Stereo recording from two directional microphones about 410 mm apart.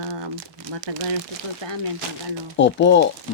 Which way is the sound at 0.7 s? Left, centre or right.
Right.